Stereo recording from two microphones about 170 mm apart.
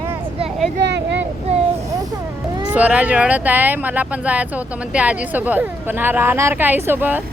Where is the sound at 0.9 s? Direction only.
90° right.